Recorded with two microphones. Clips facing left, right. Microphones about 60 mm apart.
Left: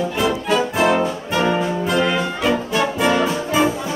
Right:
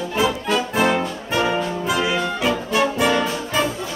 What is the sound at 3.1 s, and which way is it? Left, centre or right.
Brass instrument, centre.